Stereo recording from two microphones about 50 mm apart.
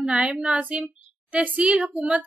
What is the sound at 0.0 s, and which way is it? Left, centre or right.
Child singing, right.